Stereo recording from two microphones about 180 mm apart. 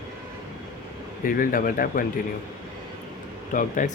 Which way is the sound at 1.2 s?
50° left (ahead or behind).